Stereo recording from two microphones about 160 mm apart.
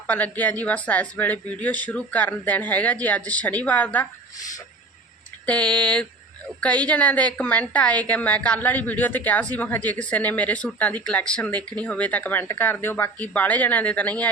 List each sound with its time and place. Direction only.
0.1 s a woman's voice: 10° left (ahead or behind)
4.4 s a sound: 20° left (ahead or behind)
5.5 s a woman's voice: 5° left (ahead or behind)